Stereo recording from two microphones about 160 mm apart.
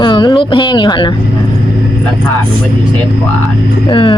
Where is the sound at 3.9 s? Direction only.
30° left (ahead or behind).